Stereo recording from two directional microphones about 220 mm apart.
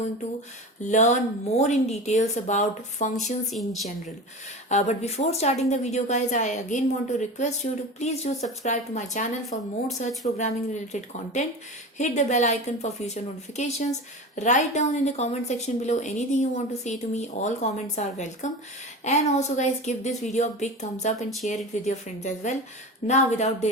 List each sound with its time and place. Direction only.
0.8 s a woman's voice: 35° left (ahead or behind)
3.5 s speech: centre (ahead or behind)
4.7 s a woman's voice: 30° left (ahead or behind)